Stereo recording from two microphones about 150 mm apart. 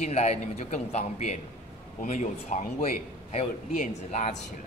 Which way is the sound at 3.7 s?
50° left (ahead or behind).